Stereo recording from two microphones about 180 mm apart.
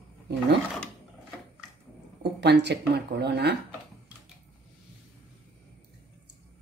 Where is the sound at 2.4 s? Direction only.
70° right (ahead or behind).